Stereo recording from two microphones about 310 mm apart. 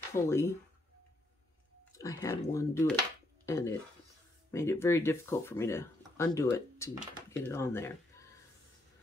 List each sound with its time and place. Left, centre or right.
0.1 s speech: centre
2.0 s speech: centre